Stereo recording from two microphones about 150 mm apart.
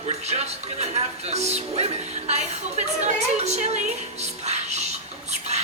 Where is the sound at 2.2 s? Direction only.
50° right (ahead or behind).